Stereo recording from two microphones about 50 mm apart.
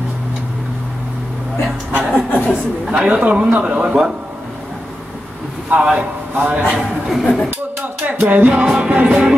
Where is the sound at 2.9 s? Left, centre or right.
Right.